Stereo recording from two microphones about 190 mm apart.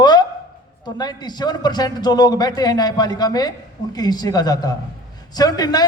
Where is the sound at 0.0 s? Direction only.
20° left (ahead or behind).